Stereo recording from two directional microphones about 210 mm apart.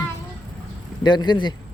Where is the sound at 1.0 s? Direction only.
20° left (ahead or behind).